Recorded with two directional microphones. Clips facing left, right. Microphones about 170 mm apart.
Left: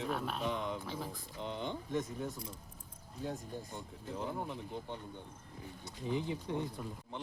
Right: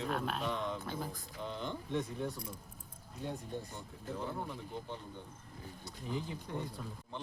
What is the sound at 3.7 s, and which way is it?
Speech, 20° left (ahead or behind).